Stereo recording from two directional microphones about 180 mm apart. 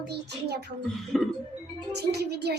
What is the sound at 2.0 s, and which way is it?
Speech, 65° right (ahead or behind).